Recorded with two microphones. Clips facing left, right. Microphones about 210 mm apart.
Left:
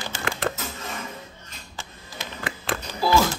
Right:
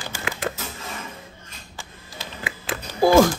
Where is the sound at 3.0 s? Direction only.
50° right (ahead or behind).